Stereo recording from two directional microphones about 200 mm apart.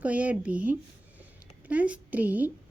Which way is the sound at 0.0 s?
5° right (ahead or behind).